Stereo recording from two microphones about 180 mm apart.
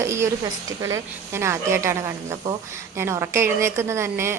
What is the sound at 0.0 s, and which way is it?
A woman's voice, 15° right (ahead or behind).